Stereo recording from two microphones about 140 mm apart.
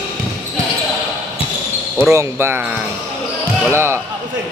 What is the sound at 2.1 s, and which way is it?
A man's voice, 20° right (ahead or behind).